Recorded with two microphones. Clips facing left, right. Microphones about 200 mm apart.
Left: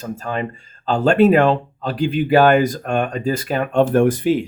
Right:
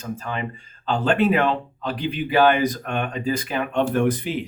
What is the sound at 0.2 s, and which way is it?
Speech, 45° left (ahead or behind).